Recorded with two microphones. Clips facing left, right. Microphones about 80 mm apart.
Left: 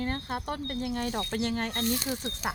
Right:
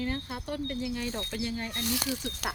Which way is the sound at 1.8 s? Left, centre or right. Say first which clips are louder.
Even; right.